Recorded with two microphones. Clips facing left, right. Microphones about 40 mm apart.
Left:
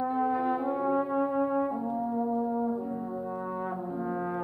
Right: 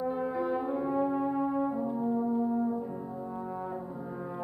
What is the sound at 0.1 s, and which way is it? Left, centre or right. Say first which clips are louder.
Brass instrument: left 3 dB; centre.